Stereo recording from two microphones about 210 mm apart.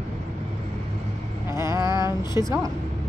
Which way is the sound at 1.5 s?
15° right (ahead or behind).